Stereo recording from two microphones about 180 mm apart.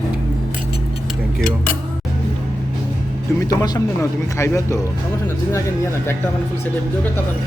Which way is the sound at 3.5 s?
20° left (ahead or behind).